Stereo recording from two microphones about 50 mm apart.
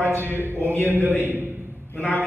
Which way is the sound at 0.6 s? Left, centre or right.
Left.